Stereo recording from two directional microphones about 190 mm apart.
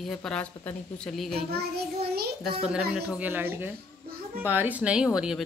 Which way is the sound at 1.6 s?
55° right (ahead or behind).